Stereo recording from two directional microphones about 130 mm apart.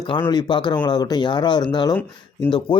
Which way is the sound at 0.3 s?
35° left (ahead or behind).